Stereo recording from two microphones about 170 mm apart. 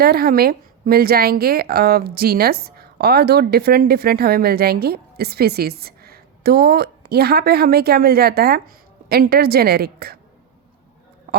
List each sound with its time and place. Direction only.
0.0 s a woman's voice: 65° right (ahead or behind)